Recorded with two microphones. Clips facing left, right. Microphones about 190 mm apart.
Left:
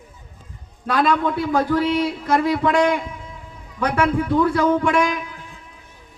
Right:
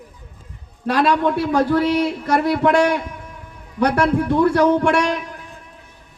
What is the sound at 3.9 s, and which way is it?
Speech, 40° right (ahead or behind).